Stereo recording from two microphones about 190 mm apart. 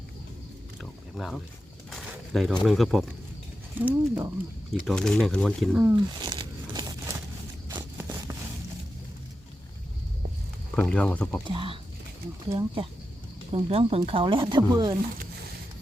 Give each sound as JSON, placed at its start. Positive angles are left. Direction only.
{"t": 0.8, "sound": "speech", "side_deg": 0}
{"t": 1.9, "sound": "pigeon", "side_deg": 0}
{"t": 2.6, "sound": "speech", "side_deg": 0}
{"t": 4.7, "sound": "speech", "side_deg": 0}
{"t": 5.8, "sound": "a sound", "side_deg": -15}
{"t": 10.8, "sound": "speech", "side_deg": 5}
{"t": 11.4, "sound": "speech", "side_deg": -25}